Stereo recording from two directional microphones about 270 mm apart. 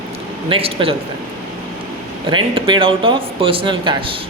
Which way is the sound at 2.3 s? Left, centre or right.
Centre.